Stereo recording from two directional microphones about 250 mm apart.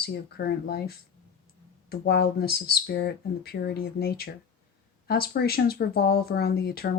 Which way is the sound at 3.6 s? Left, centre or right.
Left.